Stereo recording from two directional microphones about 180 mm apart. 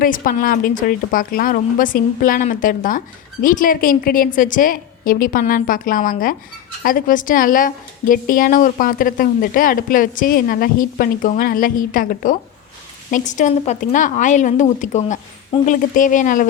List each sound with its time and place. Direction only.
0.0 s a woman's voice: 50° left (ahead or behind)